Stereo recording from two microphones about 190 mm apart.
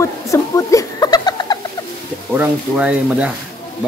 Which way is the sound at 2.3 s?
5° right (ahead or behind).